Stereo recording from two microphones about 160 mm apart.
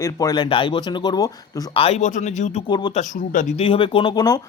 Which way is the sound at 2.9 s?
50° left (ahead or behind).